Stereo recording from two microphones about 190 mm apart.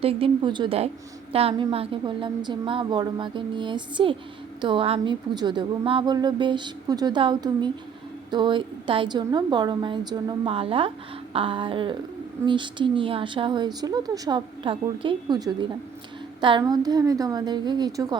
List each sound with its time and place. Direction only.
0.0 s speech: 30° right (ahead or behind)